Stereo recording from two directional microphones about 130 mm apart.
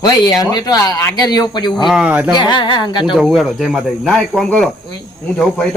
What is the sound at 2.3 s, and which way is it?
Speech, 35° left (ahead or behind).